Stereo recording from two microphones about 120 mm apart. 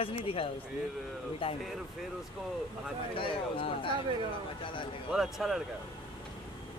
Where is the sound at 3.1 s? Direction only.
45° left (ahead or behind).